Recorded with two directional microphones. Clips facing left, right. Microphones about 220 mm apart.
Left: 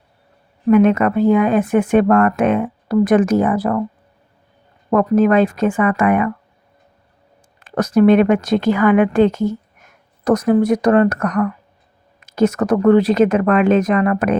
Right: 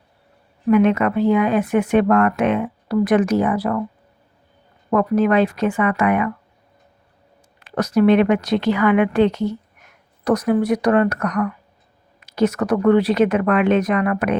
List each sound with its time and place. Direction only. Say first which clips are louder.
0.7 s speech: left 3 dB; 45° left (ahead or behind)
4.9 s speech: left 3 dB; 45° left (ahead or behind)
7.6 s speech: left 3 dB; 50° left (ahead or behind)